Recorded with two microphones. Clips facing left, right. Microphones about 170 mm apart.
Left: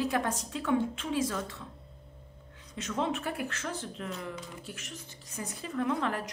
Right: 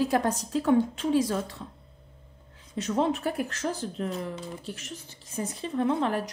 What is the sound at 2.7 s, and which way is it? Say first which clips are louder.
A woman's voice: right 6 dB; 35° right (ahead or behind).